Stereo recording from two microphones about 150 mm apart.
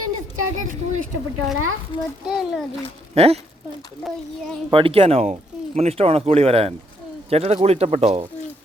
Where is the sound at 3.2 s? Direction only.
45° right (ahead or behind).